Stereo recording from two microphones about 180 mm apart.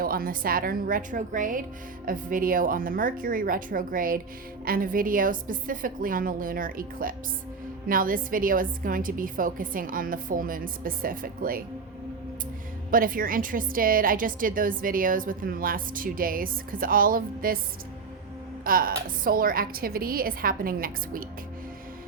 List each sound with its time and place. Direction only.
0.0 s a woman's voice: 55° right (ahead or behind)
12.9 s a woman's voice: 50° right (ahead or behind)
18.6 s a woman's voice: 50° right (ahead or behind)